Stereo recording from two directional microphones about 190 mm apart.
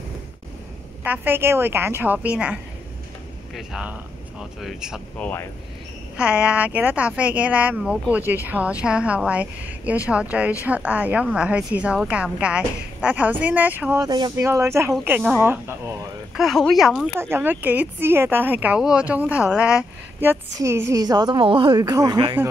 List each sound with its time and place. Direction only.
1.0 s speech: 10° right (ahead or behind)
14.0 s speech: 20° right (ahead or behind)
16.3 s speech: centre (ahead or behind)
17.2 s a woman's voice: 10° right (ahead or behind)